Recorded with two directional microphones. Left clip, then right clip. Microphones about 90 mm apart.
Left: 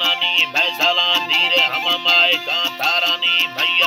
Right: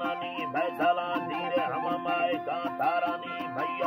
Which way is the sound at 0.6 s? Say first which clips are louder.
Left 10 dB; 45° left (ahead or behind).